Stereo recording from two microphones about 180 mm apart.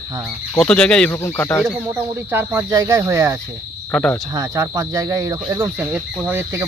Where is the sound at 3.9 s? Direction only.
5° left (ahead or behind).